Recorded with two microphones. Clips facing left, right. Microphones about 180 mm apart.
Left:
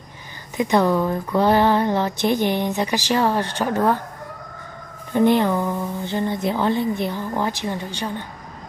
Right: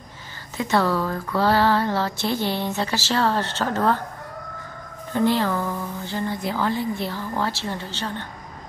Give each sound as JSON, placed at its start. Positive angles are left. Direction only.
{"t": 0.6, "sound": "speech", "side_deg": 15}
{"t": 5.1, "sound": "speech", "side_deg": 20}